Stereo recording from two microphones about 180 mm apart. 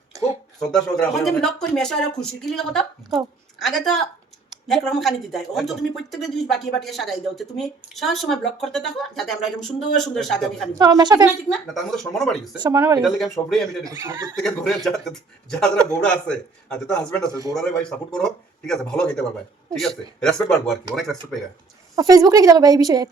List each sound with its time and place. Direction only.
0.1 s a sound: 20° right (ahead or behind)
0.9 s speech: centre (ahead or behind)
10.8 s a woman's voice: 20° right (ahead or behind)
11.4 s speech: centre (ahead or behind)
12.5 s a woman's voice: 20° right (ahead or behind)
13.0 s speech: centre (ahead or behind)
13.8 s a woman's voice: 15° right (ahead or behind)
14.3 s speech: 5° left (ahead or behind)
17.5 s a man's voice: 15° right (ahead or behind)
18.1 s speech: 5° left (ahead or behind)
21.9 s a woman's voice: 20° right (ahead or behind)